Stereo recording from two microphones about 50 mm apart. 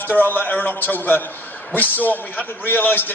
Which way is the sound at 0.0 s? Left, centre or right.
Left.